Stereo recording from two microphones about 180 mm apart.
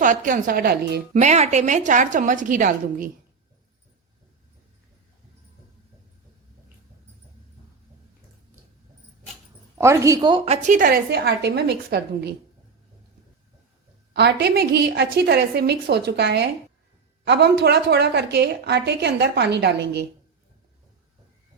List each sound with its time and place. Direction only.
0.0 s a woman's voice: 45° right (ahead or behind)
1.1 s a woman's voice: 40° right (ahead or behind)
9.7 s a woman's voice: 15° right (ahead or behind); by 10.8 s 35° right (ahead or behind)
10.8 s a woman's voice: 55° right (ahead or behind)
14.1 s a woman's voice: 70° right (ahead or behind)